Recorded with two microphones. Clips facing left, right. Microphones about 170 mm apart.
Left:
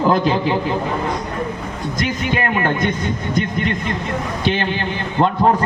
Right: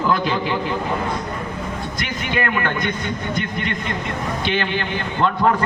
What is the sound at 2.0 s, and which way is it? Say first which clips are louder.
Speech: left 4 dB; 40° left (ahead or behind).